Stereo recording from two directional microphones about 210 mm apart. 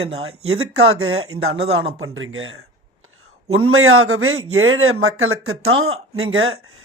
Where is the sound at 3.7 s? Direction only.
80° right.